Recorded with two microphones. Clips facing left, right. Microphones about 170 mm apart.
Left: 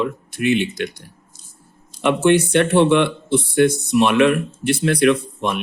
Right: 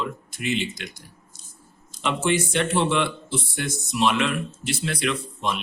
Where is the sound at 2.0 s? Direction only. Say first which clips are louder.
Left 8 dB; 60° left (ahead or behind).